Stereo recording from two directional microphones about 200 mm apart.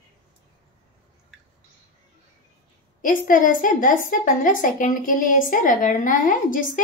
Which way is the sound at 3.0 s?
40° left (ahead or behind).